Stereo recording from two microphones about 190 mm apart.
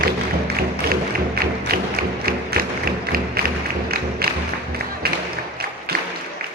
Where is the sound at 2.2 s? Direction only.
50° right (ahead or behind).